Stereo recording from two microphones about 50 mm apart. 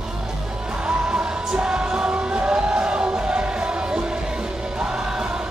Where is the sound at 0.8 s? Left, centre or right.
Centre.